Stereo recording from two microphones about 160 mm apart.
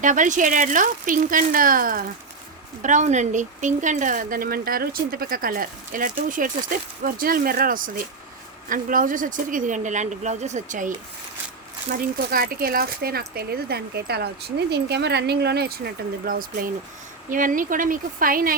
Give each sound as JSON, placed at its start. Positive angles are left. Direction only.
{"t": 0.0, "sound": "speech", "side_deg": -50}
{"t": 2.8, "sound": "speech", "side_deg": -50}
{"t": 11.9, "sound": "speech", "side_deg": -65}